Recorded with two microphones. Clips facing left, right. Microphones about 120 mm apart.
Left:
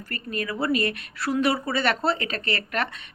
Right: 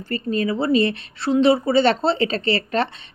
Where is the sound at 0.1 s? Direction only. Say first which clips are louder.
Right 9 dB; 25° right (ahead or behind).